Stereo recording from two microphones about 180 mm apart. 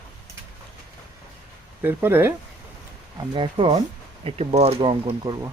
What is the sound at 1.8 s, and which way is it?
Speech, 10° right (ahead or behind).